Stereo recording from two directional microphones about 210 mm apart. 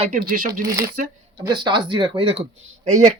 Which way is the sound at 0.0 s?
40° right (ahead or behind).